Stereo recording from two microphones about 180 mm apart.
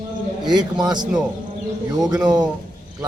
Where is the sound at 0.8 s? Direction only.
25° right (ahead or behind).